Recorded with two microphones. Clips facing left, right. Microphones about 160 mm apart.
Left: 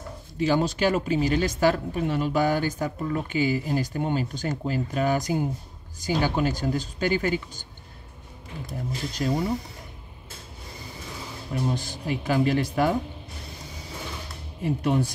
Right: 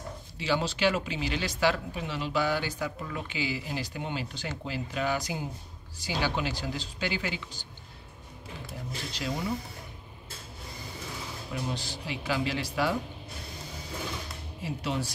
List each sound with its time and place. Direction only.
0.4 s speech: 45° left (ahead or behind)
8.6 s speech: 45° left (ahead or behind)
11.5 s speech: 50° left (ahead or behind)
14.6 s speech: 55° left (ahead or behind)